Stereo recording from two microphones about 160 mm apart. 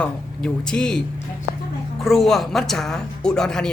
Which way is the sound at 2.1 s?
Centre (ahead or behind).